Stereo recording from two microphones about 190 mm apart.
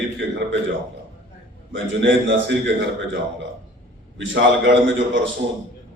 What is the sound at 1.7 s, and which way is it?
Speech, 75° right (ahead or behind).